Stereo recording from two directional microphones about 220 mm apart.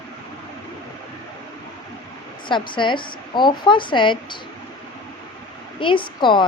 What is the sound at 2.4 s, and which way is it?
A woman's voice, 20° left (ahead or behind).